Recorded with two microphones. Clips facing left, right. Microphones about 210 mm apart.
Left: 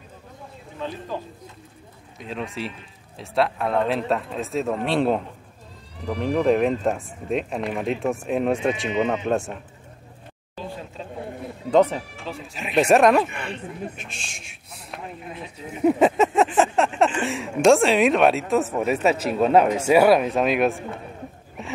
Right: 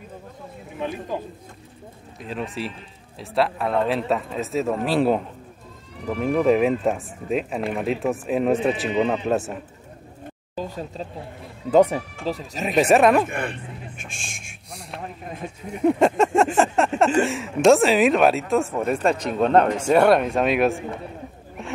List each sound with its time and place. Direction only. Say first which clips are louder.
2.1 s a man's voice: right 1 dB; centre (ahead or behind)
10.5 s a sound: right 4 dB; 40° right (ahead or behind)
11.7 s speech: right 2 dB; 10° right (ahead or behind)
12.3 s speech: right 9 dB; 40° right (ahead or behind)
12.7 s a man's voice: even; centre (ahead or behind)
13.3 s speech: right 3 dB; 50° right (ahead or behind)
14.7 s a sound: right 2 dB; centre (ahead or behind)
15.8 s a man's voice: even; centre (ahead or behind)
16.5 s a sound: even; centre (ahead or behind)
17.2 s a man's voice: right 2 dB; centre (ahead or behind)
21.6 s dog: right 1 dB; centre (ahead or behind)